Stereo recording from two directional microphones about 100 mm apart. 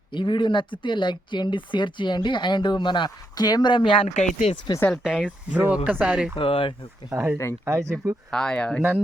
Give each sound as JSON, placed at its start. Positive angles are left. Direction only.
{"t": 0.1, "sound": "speech", "side_deg": 50}
{"t": 4.7, "sound": "speech", "side_deg": 30}
{"t": 5.0, "sound": "speech", "side_deg": -5}
{"t": 6.3, "sound": "speech", "side_deg": 60}
{"t": 7.1, "sound": "speech", "side_deg": -20}
{"t": 8.3, "sound": "speech", "side_deg": 5}